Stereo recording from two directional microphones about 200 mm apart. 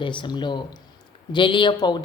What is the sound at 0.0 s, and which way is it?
A woman's voice, 25° left (ahead or behind).